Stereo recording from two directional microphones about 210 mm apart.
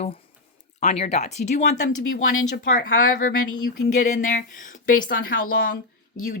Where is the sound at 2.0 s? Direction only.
70° left (ahead or behind).